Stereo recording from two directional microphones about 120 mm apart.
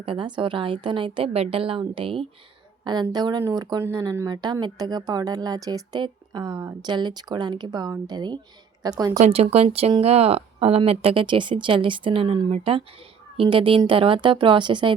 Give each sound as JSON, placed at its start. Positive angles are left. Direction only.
{"t": 0.0, "sound": "speech", "side_deg": -45}
{"t": 2.8, "sound": "speech", "side_deg": -35}
{"t": 9.1, "sound": "speech", "side_deg": -60}